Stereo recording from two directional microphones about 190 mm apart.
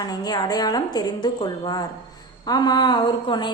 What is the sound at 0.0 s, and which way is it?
A woman's voice, 20° left (ahead or behind).